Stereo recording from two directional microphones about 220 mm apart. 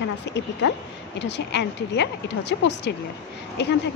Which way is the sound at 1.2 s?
50° left (ahead or behind).